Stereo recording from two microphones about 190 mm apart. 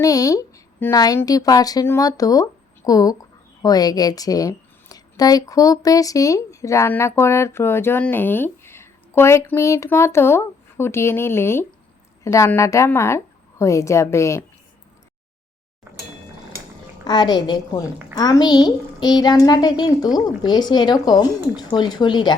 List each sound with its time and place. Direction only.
0.0 s a woman's voice: 20° left (ahead or behind)
17.1 s a woman's voice: 20° left (ahead or behind)